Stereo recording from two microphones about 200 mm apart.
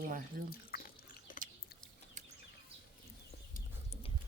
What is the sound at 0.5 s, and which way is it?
Speech, 50° left (ahead or behind).